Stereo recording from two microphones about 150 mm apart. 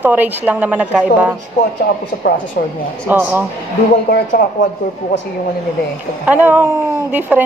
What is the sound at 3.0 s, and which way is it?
Speech, 15° right (ahead or behind).